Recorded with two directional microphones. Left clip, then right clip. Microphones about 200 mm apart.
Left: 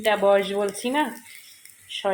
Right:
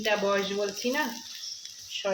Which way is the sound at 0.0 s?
35° left (ahead or behind).